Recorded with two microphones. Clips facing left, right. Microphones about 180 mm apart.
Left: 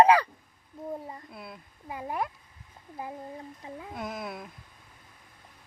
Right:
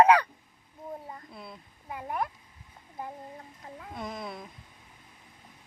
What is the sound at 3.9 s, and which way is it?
Speech, 5° left (ahead or behind).